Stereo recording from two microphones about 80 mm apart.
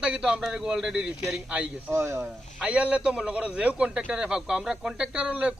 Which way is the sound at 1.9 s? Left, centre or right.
Right.